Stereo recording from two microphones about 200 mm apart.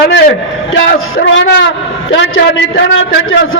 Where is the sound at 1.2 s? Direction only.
65° left (ahead or behind).